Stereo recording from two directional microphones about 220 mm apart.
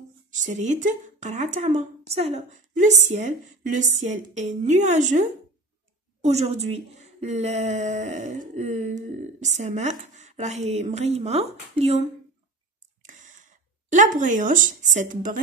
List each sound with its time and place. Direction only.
0.3 s a woman's voice: 35° right (ahead or behind)
6.2 s a woman's voice: 30° right (ahead or behind)
13.0 s a sound: 35° right (ahead or behind)